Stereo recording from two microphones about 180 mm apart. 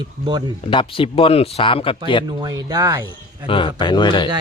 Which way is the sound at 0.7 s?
30° left (ahead or behind).